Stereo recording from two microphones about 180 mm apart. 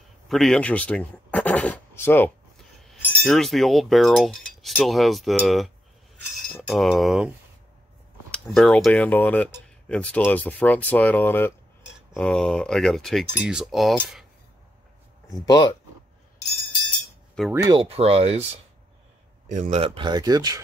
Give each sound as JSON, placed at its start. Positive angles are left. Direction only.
{"t": 0.3, "sound": "speech", "side_deg": 0}
{"t": 2.8, "sound": "a sound", "side_deg": 5}
{"t": 8.3, "sound": "speech", "side_deg": 0}
{"t": 12.1, "sound": "a sound", "side_deg": 0}
{"t": 15.3, "sound": "speech", "side_deg": 20}
{"t": 17.5, "sound": "speech", "side_deg": -15}
{"t": 17.8, "sound": "speech", "side_deg": -35}
{"t": 19.5, "sound": "speech", "side_deg": -40}